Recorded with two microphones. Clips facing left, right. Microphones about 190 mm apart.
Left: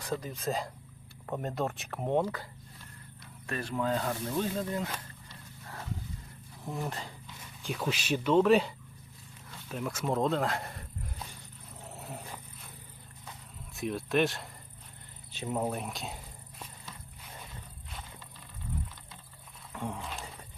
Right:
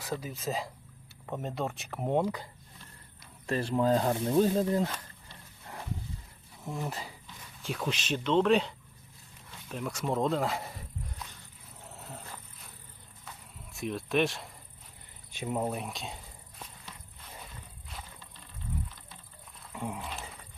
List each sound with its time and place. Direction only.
0.0 s speech: 5° right (ahead or behind)
3.4 s speech: 30° right (ahead or behind)
6.7 s speech: centre (ahead or behind)
11.8 s dog: 15° left (ahead or behind)
13.7 s speech: centre (ahead or behind)
15.3 s speech: 10° right (ahead or behind)
15.6 s insect: centre (ahead or behind)
19.7 s a sound: 10° right (ahead or behind)